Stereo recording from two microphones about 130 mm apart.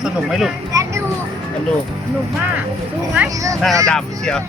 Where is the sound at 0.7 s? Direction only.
25° right (ahead or behind).